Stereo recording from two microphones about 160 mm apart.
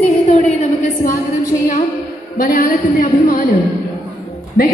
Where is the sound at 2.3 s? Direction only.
60° left (ahead or behind).